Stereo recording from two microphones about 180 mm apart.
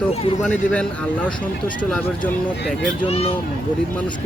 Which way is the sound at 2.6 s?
Centre (ahead or behind).